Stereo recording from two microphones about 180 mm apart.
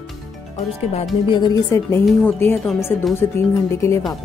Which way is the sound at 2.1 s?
5° left (ahead or behind).